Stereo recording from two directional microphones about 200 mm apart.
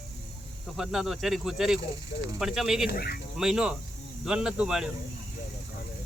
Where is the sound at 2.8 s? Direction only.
50° left (ahead or behind).